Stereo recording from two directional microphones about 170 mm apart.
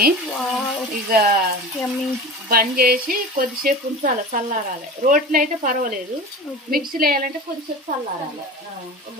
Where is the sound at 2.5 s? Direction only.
60° right (ahead or behind).